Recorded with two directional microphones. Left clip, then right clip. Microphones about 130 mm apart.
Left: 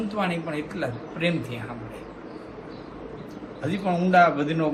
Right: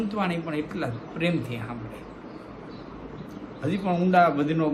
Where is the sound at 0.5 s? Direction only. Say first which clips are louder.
Left 1 dB; 45° right (ahead or behind).